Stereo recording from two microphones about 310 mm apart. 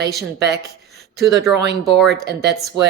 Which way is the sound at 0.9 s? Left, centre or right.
Right.